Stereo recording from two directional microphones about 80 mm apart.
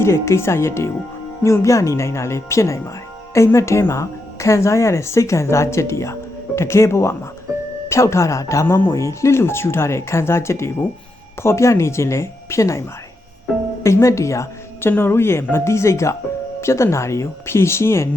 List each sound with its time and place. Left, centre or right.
0.0 s a woman's voice: left
8.6 s a woman's voice: left
13.8 s a woman's voice: left